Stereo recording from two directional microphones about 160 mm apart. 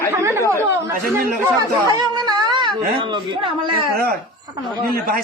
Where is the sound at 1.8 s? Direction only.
25° right (ahead or behind).